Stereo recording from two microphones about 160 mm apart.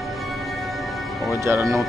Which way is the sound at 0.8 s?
Centre (ahead or behind).